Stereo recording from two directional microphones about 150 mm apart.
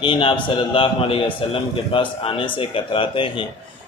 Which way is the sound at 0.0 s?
35° left (ahead or behind).